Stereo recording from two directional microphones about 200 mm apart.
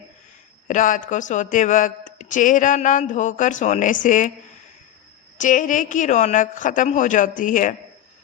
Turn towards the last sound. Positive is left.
turn(degrees=40)  # may be behind; listen again after turning